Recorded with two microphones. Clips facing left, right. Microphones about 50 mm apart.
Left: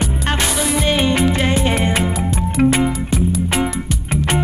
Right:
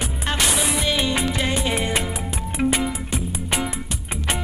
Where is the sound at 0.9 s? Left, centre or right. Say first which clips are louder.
Left 6 dB; left.